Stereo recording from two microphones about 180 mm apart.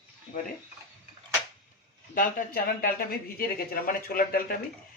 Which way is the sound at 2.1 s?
50° left (ahead or behind).